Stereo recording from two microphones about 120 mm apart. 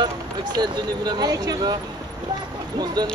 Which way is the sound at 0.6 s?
35° right (ahead or behind).